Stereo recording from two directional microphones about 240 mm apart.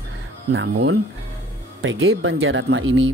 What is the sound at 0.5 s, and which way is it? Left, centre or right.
Speech, right.